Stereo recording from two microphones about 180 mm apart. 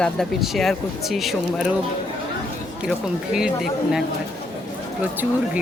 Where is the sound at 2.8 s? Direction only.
5° right (ahead or behind).